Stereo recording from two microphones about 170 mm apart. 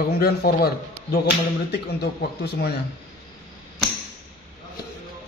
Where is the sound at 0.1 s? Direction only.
65° left (ahead or behind).